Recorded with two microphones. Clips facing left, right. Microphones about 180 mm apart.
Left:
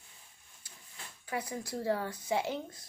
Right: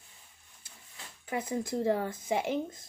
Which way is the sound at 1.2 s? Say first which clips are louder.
Right 4 dB; 25° right (ahead or behind).